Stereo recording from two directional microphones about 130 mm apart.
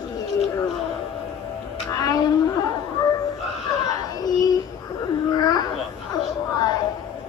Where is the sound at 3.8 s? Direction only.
30° left (ahead or behind).